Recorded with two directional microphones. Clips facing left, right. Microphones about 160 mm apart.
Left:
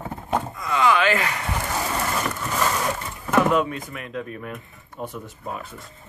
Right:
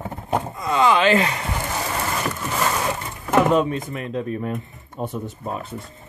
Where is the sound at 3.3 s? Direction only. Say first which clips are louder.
Right 2 dB; 30° right (ahead or behind).